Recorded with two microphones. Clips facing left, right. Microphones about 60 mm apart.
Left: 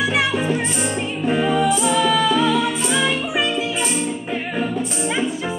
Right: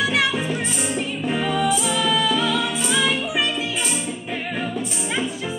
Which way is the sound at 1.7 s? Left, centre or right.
Centre.